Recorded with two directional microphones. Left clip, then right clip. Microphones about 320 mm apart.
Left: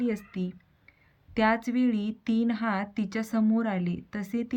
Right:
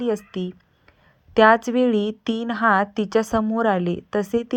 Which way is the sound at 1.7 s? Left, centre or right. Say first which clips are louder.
Right 9 dB; right.